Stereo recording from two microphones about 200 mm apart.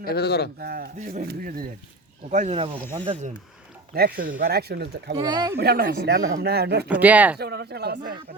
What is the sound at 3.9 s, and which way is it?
Speech, 45° right (ahead or behind).